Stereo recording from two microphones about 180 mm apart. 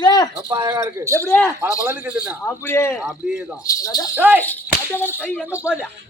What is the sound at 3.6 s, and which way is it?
Speech, 20° left (ahead or behind).